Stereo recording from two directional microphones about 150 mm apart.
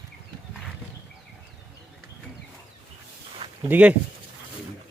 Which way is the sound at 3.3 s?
35° right (ahead or behind).